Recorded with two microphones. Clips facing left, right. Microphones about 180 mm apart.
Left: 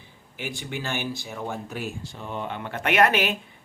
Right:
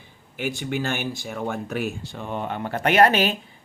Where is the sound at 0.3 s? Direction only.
50° right (ahead or behind).